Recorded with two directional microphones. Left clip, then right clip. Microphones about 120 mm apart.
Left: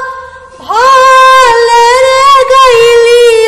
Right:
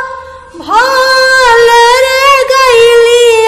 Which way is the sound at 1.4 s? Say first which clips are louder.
Even; 30° right (ahead or behind).